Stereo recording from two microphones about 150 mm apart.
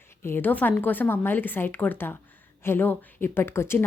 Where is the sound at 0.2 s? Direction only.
15° left (ahead or behind).